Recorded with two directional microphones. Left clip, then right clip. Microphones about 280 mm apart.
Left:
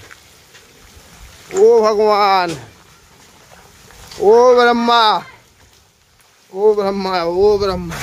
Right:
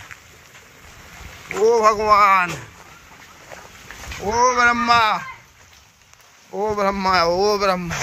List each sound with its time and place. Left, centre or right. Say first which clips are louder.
1.7 s speech: left 1 dB; centre
4.3 s speech: left 7 dB; centre
6.6 s speech: left 6 dB; centre